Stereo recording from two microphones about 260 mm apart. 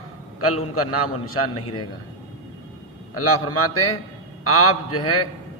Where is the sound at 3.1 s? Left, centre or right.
Left.